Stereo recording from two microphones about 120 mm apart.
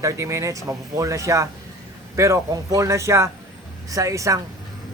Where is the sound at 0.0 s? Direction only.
25° right (ahead or behind).